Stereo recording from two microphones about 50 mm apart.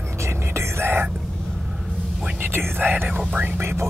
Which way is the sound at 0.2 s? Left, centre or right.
Right.